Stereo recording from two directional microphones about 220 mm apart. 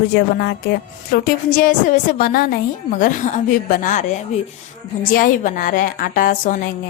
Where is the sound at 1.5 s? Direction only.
40° left (ahead or behind).